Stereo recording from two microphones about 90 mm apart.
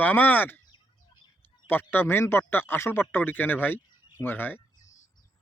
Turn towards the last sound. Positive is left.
turn(degrees=25)  # may be behind; listen again after turning